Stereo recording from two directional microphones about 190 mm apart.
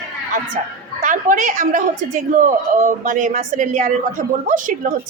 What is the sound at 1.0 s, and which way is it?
A woman's voice, 45° right (ahead or behind).